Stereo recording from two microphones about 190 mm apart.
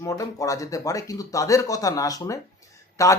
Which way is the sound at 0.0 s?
15° left (ahead or behind).